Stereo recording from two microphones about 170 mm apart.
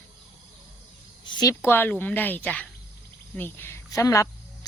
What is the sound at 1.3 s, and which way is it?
Speech, 25° left (ahead or behind).